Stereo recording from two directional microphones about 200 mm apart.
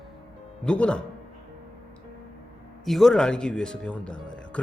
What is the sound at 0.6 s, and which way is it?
Speech, 5° left (ahead or behind).